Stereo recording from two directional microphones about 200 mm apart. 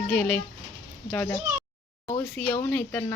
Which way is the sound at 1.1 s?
15° left (ahead or behind).